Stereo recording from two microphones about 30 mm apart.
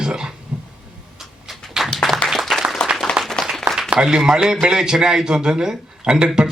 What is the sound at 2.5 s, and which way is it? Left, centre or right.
Applause, centre.